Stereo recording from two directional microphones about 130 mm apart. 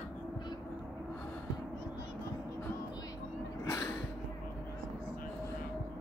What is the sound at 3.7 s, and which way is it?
Music, 20° left (ahead or behind).